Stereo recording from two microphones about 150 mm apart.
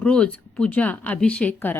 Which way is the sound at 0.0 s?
10° left (ahead or behind).